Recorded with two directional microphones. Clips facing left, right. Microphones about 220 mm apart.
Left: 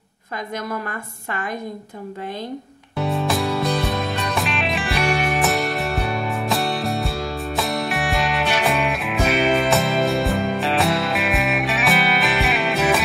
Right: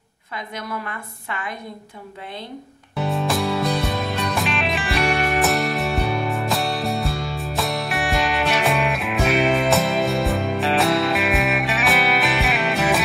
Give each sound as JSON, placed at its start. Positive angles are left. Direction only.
{"t": 0.7, "sound": "a woman's voice", "side_deg": 45}
{"t": 3.0, "sound": "music", "side_deg": 0}